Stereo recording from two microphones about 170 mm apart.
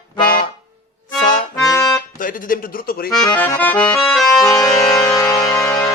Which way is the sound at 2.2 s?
55° left (ahead or behind).